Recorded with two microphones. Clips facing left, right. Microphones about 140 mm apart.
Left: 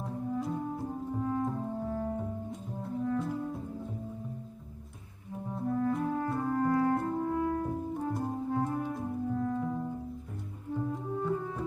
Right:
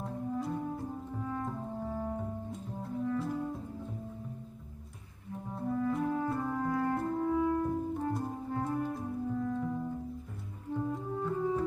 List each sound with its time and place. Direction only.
1.1 s clarinet: 5° left (ahead or behind)
2.5 s music: centre (ahead or behind)
5.5 s clarinet: centre (ahead or behind)
8.1 s music: centre (ahead or behind)